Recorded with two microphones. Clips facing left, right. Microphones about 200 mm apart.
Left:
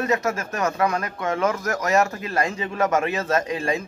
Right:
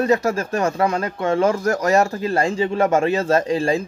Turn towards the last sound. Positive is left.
turn(degrees=-30)  # may be behind; listen again after turning